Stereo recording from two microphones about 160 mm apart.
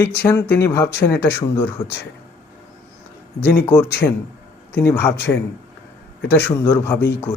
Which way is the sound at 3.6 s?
10° left (ahead or behind).